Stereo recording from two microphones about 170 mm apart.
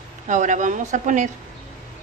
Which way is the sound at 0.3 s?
45° right (ahead or behind).